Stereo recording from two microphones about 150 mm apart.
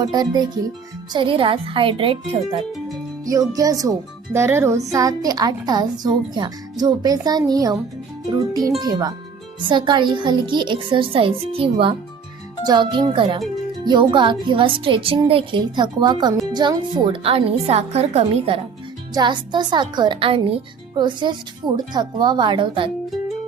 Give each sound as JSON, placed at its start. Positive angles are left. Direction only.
{"t": 0.0, "sound": "a child's voice", "side_deg": -25}
{"t": 3.5, "sound": "a child's voice", "side_deg": -25}
{"t": 19.1, "sound": "speech", "side_deg": -30}